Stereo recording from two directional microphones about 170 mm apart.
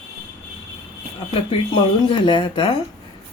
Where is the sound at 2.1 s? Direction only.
30° left (ahead or behind).